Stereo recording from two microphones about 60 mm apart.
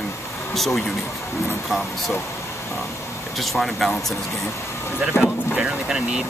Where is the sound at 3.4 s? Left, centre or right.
Centre.